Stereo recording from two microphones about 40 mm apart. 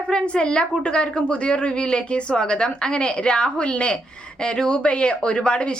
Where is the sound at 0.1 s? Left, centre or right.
Left.